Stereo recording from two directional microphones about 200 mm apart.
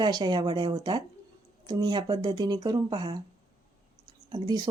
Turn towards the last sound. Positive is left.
turn(degrees=-20)  # may be behind; listen again after turning